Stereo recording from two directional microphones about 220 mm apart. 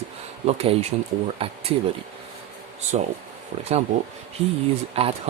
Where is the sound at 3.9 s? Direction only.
35° right (ahead or behind).